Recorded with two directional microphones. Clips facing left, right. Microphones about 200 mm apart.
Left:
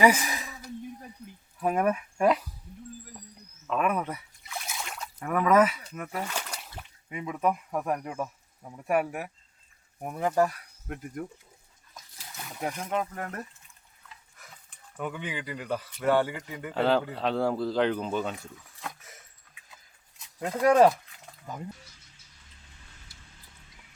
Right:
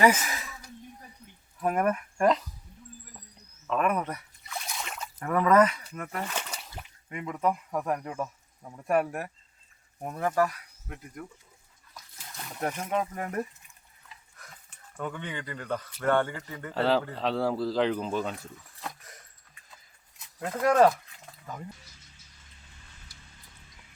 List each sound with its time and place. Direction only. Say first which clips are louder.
0.0 s speech: left 1 dB; 10° left (ahead or behind)
1.6 s speech: left 1 dB; 10° left (ahead or behind)
3.7 s a sound: even; 5° left (ahead or behind)
7.1 s speech: left 1 dB; 15° left (ahead or behind)
10.2 s speech: left 1 dB; 20° left (ahead or behind)
10.8 s speech: left 6 dB; 55° left (ahead or behind)
12.4 s speech: right 1 dB; centre (ahead or behind)
16.7 s speech: left 1 dB; centre (ahead or behind)
20.4 s speech: left 2 dB; 15° left (ahead or behind)